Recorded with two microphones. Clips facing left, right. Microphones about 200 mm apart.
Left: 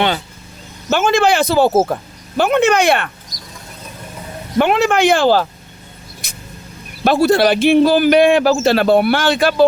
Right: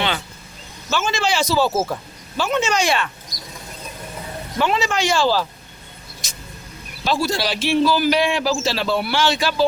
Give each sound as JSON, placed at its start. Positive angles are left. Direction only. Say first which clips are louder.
{"t": 0.9, "sound": "a man's voice", "louder": "left 8 dB", "side_deg": 55}
{"t": 4.5, "sound": "a man's voice", "louder": "left 7 dB", "side_deg": 60}
{"t": 6.2, "sound": "vehicle", "louder": "left 2 dB", "side_deg": 55}
{"t": 7.0, "sound": "a man's voice", "louder": "left 9 dB", "side_deg": 55}